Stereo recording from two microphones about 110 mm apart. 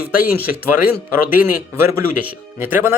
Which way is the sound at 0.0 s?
15° right (ahead or behind).